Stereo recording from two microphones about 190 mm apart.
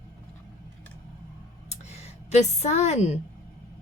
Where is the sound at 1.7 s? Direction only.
35° left (ahead or behind).